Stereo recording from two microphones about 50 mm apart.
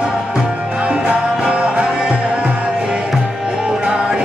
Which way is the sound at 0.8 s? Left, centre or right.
Right.